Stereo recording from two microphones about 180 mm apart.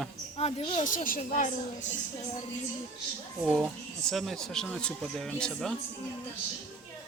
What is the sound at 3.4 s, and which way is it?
Speech, 5° right (ahead or behind).